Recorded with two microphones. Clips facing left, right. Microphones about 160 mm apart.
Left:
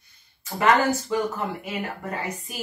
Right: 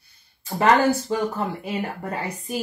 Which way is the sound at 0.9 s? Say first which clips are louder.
Right 2 dB; 30° right (ahead or behind).